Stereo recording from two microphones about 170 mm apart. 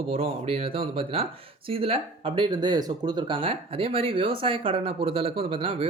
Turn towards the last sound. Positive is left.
turn(degrees=-30)  # may be behind; listen again after turning